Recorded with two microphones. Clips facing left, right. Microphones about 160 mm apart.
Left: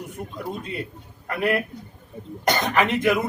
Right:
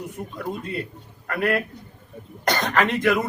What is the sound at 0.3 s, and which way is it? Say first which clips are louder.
Speech: right 1 dB; 20° left (ahead or behind).